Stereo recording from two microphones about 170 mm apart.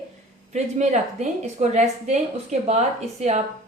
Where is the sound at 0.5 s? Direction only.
40° right (ahead or behind).